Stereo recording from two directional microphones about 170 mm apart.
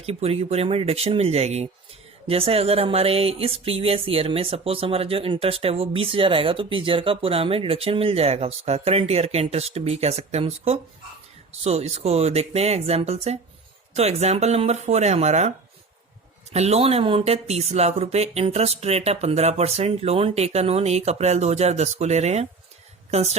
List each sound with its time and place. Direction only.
0.0 s speech: 35° right (ahead or behind)